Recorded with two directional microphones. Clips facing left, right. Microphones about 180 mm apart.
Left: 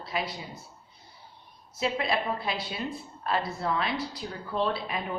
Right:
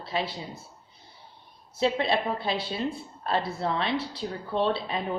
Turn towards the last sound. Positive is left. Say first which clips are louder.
# right 3 dB
turn(degrees=-30)  # may be behind; listen again after turning